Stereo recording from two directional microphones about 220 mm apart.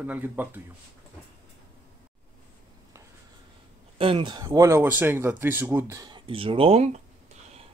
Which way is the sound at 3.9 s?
25° right (ahead or behind).